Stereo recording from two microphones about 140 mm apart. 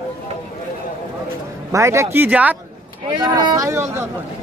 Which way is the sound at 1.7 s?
20° right (ahead or behind).